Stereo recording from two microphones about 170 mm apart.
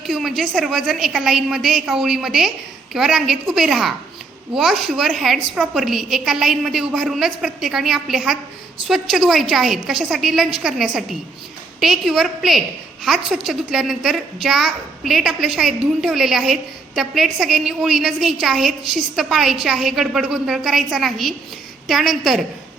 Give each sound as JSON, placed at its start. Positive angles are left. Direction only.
{"t": 0.0, "sound": "a woman's voice", "side_deg": 0}